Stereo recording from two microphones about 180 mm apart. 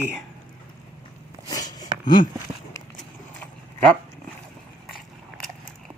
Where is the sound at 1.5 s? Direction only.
20° left (ahead or behind).